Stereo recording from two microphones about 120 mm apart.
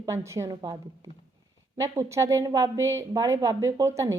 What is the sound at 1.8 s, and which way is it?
A woman's voice, 25° right (ahead or behind).